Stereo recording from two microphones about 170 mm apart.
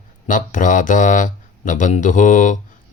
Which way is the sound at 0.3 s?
50° left (ahead or behind).